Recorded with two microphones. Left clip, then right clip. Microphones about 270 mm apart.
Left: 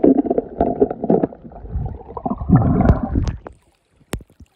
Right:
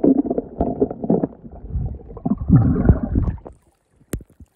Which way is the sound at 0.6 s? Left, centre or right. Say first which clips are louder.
Left 4 dB; centre.